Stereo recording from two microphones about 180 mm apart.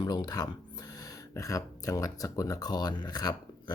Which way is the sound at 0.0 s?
20° left (ahead or behind).